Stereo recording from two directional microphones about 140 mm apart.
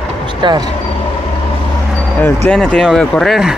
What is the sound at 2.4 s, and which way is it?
Speech, 5° left (ahead or behind).